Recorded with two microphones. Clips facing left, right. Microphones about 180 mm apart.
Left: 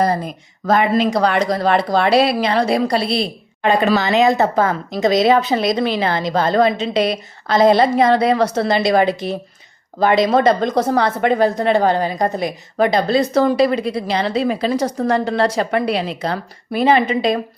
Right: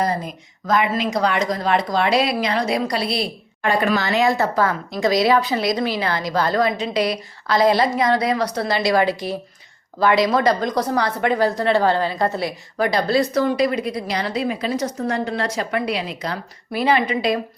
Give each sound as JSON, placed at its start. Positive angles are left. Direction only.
{"t": 0.7, "sound": "a woman's voice", "side_deg": 30}
{"t": 13.4, "sound": "a woman's voice", "side_deg": 30}